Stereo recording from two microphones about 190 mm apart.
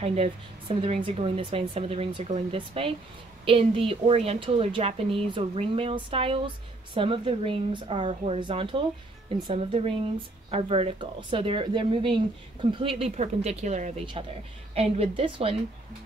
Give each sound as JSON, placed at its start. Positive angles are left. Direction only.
{"t": 0.0, "sound": "a woman's voice", "side_deg": -30}